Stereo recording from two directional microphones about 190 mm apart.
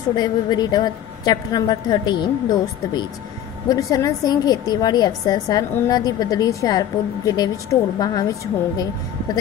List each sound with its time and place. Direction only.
0.1 s a woman's voice: 20° left (ahead or behind)
3.6 s a woman's voice: 20° left (ahead or behind)